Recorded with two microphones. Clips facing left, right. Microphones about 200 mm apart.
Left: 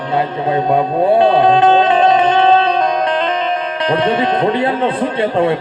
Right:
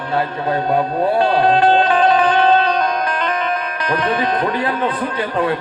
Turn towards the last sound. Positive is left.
turn(degrees=25)  # may be behind; listen again after turning